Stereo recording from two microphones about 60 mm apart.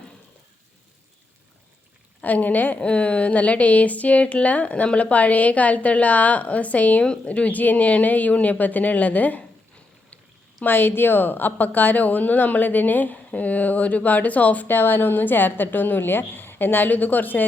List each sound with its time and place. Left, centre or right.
2.2 s a woman's voice: left
10.6 s speech: left